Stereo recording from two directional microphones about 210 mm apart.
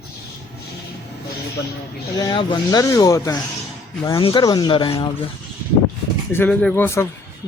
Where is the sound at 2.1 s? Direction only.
20° left (ahead or behind).